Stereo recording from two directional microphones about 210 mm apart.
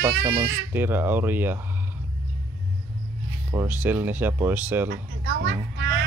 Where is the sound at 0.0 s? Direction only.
15° right (ahead or behind).